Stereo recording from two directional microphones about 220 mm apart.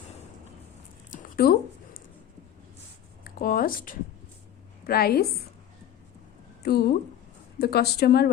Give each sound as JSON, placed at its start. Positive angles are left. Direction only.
{"t": 1.1, "sound": "a sound", "side_deg": 40}
{"t": 3.2, "sound": "speech", "side_deg": 40}
{"t": 6.6, "sound": "a woman's voice", "side_deg": 45}